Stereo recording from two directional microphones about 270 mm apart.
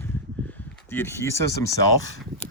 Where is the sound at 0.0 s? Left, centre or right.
Centre.